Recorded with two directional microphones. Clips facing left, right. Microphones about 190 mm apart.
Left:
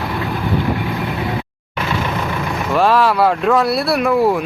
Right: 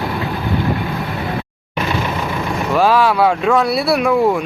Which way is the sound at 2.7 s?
Centre (ahead or behind).